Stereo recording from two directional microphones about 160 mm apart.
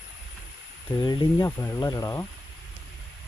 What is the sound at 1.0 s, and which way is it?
Speech, 25° left (ahead or behind).